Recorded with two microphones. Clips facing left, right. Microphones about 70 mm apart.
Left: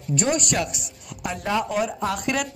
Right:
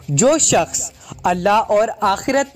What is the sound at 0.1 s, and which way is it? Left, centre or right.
Speech, right.